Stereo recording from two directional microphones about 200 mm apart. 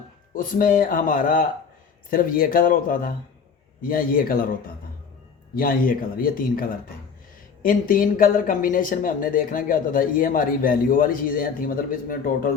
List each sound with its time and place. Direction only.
0.3 s speech: 45° left (ahead or behind)
5.5 s speech: 45° left (ahead or behind)